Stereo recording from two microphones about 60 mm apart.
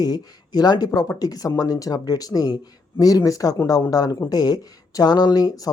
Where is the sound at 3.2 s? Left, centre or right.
Left.